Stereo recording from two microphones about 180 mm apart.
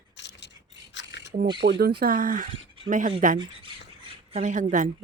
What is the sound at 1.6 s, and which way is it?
Speech, 60° right (ahead or behind).